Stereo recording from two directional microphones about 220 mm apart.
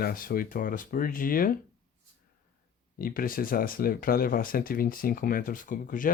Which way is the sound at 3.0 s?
40° left (ahead or behind).